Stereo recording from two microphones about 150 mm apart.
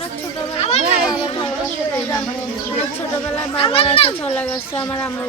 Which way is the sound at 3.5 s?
35° left (ahead or behind).